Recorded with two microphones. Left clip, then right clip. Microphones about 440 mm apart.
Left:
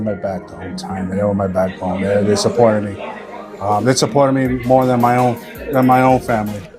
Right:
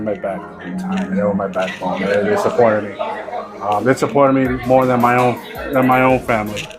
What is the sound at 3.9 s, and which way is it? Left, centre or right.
A man's voice, left.